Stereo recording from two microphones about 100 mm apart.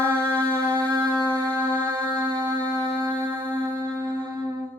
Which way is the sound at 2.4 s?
45° right (ahead or behind).